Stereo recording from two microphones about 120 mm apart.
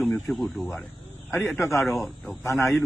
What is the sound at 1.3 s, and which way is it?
Speech, 20° left (ahead or behind).